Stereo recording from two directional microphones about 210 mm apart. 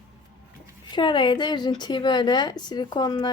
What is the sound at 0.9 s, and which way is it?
Speech, 20° left (ahead or behind).